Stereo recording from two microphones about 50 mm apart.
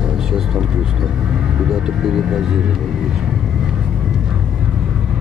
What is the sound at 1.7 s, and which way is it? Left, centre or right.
Speech, centre.